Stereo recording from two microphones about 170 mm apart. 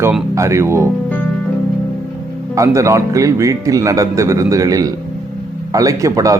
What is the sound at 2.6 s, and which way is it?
Speech, 20° right (ahead or behind).